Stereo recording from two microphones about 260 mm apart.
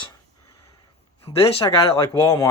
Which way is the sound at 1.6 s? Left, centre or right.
Centre.